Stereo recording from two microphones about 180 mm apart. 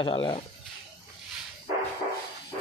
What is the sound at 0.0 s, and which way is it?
Speech, 30° left (ahead or behind).